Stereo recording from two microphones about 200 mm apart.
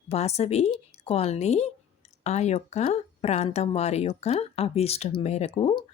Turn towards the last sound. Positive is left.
turn(degrees=25)  # may be behind; listen again after turning